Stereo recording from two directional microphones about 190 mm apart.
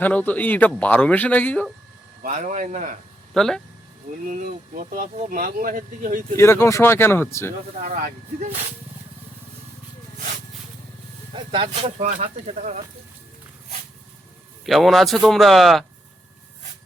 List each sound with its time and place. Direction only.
0.0 s speech: 10° left (ahead or behind)
2.2 s speech: 40° right (ahead or behind)
3.3 s a man's voice: 5° left (ahead or behind)
4.2 s speech: 45° right (ahead or behind)
6.3 s speech: 15° left (ahead or behind)
7.8 s speech: 45° right (ahead or behind)
11.3 s speech: 25° right (ahead or behind)
14.6 s a man's voice: centre (ahead or behind)